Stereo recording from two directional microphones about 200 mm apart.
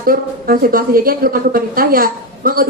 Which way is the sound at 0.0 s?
45° right (ahead or behind).